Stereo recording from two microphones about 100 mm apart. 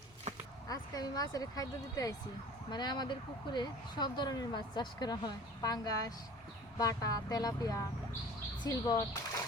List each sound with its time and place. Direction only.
0.7 s speech: 40° left (ahead or behind)